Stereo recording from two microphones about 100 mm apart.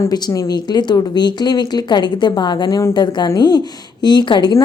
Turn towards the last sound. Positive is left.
turn(degrees=50)  # may be behind; listen again after turning